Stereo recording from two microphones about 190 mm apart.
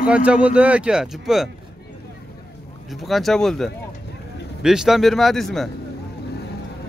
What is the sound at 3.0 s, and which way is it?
Speech, centre (ahead or behind).